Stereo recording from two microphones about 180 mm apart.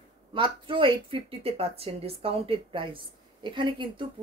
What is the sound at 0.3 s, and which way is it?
Speech, 30° right (ahead or behind).